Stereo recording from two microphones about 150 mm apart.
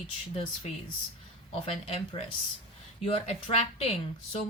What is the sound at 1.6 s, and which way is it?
Speech, 45° left (ahead or behind).